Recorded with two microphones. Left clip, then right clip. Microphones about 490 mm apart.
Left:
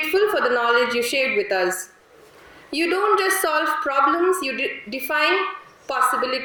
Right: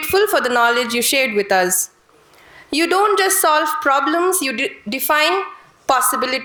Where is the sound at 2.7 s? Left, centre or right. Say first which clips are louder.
Right 4 dB; right.